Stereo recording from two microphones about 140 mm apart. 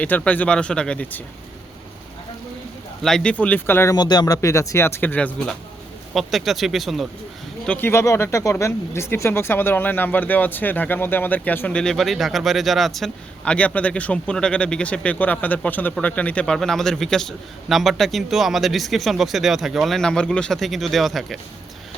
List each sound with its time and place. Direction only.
0.0 s speech: 10° left (ahead or behind)
3.0 s speech: 5° left (ahead or behind)
3.9 s speech: 30° left (ahead or behind); by 5.5 s 10° left (ahead or behind)
6.1 s speech: centre (ahead or behind)
7.7 s speech: 15° left (ahead or behind); by 21.3 s centre (ahead or behind)